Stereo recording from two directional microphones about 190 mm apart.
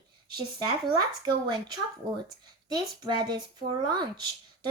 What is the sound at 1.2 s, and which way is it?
A woman's voice, 20° right (ahead or behind).